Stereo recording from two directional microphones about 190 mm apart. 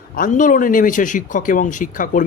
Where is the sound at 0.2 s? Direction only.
45° left (ahead or behind).